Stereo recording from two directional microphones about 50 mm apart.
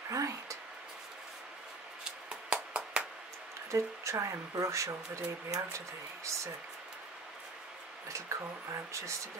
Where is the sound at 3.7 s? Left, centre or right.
Right.